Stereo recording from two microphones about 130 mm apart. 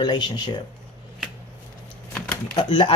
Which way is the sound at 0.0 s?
35° left (ahead or behind).